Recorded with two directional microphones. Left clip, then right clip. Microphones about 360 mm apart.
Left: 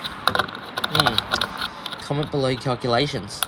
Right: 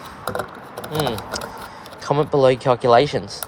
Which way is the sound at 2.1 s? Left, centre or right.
Centre.